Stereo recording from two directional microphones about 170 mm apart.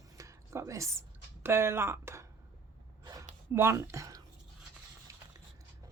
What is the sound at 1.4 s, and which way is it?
Speech, 15° right (ahead or behind).